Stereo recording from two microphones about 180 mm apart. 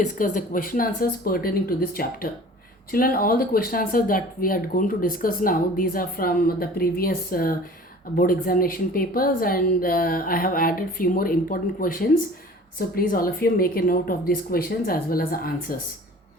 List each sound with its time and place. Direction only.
0.0 s speech: 45° left (ahead or behind)